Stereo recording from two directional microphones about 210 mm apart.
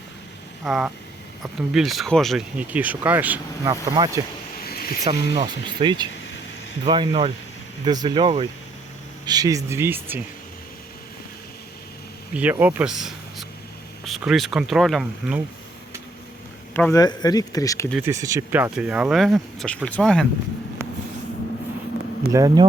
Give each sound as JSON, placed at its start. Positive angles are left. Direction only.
{"t": 0.6, "sound": "speech", "side_deg": -5}
{"t": 4.6, "sound": "a sound", "side_deg": 45}
{"t": 5.0, "sound": "speech", "side_deg": -25}
{"t": 12.3, "sound": "speech", "side_deg": -5}
{"t": 16.7, "sound": "speech", "side_deg": 10}
{"t": 17.9, "sound": "speech", "side_deg": -15}
{"t": 20.8, "sound": "vehicle", "side_deg": -10}
{"t": 22.3, "sound": "speech", "side_deg": -15}